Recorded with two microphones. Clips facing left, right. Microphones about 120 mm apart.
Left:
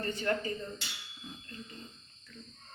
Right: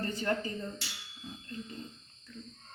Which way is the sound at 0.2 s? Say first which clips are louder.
Left 1 dB; 30° right (ahead or behind).